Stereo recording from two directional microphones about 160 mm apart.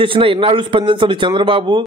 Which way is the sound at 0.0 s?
35° right (ahead or behind).